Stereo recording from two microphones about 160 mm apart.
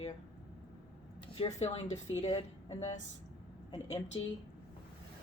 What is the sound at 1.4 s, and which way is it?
A woman's voice, 45° left (ahead or behind).